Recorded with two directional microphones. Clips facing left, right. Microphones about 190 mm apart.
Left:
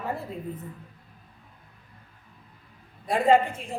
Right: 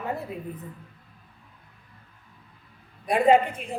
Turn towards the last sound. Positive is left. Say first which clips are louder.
# right 1 dB
turn(degrees=-20)  # may be behind; listen again after turning